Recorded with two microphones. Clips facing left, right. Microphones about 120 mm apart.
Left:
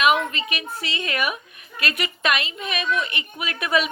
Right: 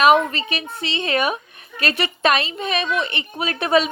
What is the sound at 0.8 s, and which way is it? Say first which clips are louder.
A woman's voice: right 6 dB; 25° right (ahead or behind).